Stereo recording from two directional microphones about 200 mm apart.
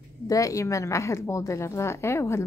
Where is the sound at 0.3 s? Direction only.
15° left (ahead or behind).